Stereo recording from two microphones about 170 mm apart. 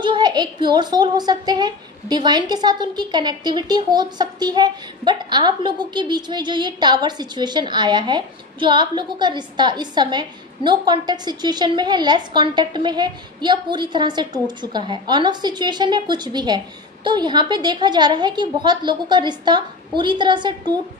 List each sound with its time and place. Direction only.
0.0 s a woman's voice: 25° right (ahead or behind)